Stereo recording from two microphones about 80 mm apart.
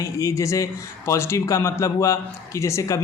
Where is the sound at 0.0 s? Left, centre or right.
Left.